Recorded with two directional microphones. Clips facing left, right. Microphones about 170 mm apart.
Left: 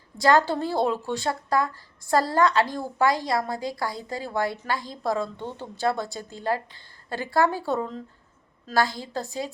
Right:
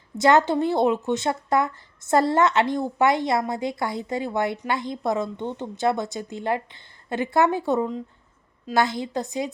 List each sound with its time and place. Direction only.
0.2 s a woman's voice: 20° right (ahead or behind)